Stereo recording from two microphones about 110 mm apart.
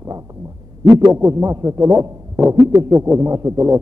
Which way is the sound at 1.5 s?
25° right (ahead or behind).